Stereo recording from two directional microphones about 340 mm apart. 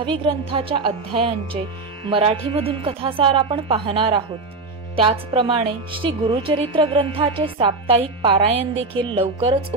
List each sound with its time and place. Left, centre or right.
0.0 s a woman's voice: centre